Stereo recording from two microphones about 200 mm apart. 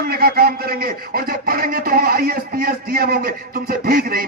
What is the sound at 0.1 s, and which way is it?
Speech, 50° right (ahead or behind).